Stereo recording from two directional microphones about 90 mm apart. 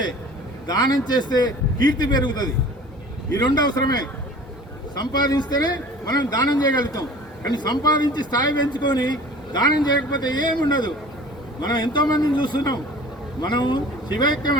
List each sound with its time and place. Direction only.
0.7 s speech: 45° left (ahead or behind)